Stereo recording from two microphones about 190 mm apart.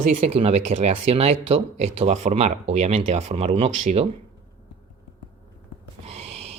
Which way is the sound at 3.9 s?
45° right (ahead or behind).